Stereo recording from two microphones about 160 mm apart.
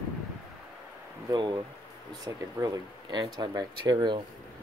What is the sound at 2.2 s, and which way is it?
Speech, 25° right (ahead or behind).